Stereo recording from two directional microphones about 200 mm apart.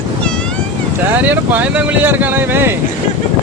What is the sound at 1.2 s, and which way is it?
Speech, 10° right (ahead or behind).